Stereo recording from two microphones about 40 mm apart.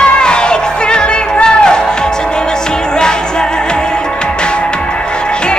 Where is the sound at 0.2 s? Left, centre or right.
Left.